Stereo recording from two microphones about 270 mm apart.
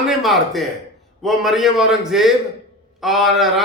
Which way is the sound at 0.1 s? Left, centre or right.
Centre.